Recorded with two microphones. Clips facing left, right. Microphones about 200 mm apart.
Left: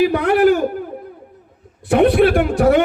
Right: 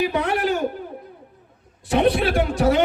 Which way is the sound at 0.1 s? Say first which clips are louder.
Left 9 dB; 60° left (ahead or behind).